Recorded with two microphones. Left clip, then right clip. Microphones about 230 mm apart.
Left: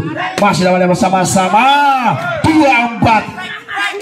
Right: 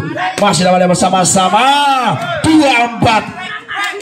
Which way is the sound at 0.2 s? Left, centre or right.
Right.